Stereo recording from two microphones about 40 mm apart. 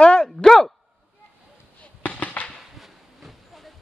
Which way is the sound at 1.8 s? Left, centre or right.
Left.